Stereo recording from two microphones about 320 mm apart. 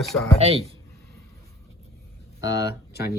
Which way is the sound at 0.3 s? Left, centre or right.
Centre.